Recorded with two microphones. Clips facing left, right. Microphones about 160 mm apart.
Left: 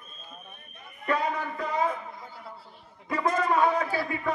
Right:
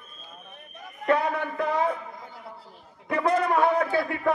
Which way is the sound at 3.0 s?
65° right (ahead or behind).